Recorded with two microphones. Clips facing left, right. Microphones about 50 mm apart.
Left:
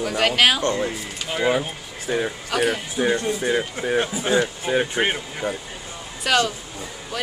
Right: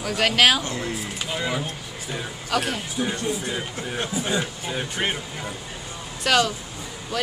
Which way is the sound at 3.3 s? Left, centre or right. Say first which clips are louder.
Left 7 dB; left.